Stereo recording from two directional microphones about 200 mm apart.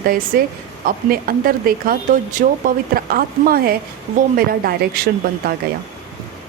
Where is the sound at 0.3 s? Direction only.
50° right (ahead or behind).